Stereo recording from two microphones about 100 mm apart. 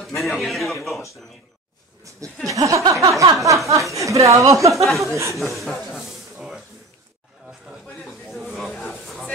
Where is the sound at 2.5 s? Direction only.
35° right (ahead or behind).